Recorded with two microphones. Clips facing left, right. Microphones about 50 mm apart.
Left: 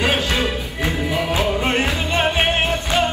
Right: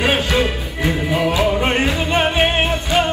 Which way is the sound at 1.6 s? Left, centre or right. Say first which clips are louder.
Right 2 dB; right.